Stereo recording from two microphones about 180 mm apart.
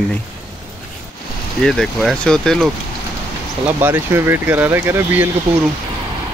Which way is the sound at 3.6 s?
10° right (ahead or behind).